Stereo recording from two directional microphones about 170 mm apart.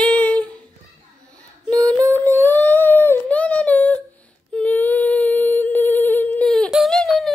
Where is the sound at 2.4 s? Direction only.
10° left (ahead or behind).